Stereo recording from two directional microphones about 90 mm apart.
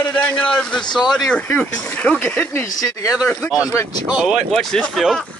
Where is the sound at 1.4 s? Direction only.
20° left (ahead or behind).